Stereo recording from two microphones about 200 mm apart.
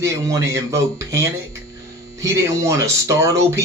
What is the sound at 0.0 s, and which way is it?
Speech, 15° right (ahead or behind).